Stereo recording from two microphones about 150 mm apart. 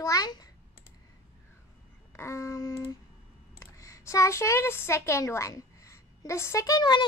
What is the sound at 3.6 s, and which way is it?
Speech, 20° left (ahead or behind).